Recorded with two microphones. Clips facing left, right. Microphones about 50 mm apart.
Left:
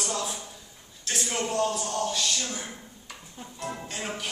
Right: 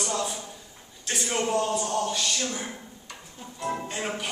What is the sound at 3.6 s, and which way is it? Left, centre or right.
Music, centre.